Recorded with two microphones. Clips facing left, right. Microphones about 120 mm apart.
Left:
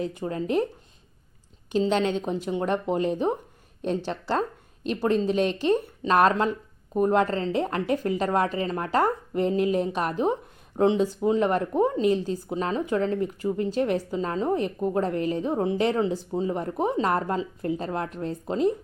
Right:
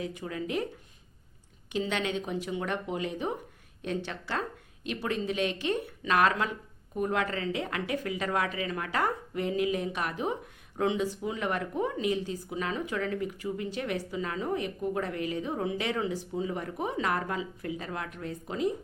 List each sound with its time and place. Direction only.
0.0 s speech: 35° left (ahead or behind)
1.7 s speech: 35° left (ahead or behind)